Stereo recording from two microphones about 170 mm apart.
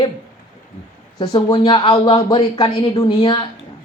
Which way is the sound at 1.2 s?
25° left (ahead or behind).